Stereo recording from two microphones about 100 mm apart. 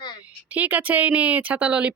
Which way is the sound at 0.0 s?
45° left (ahead or behind).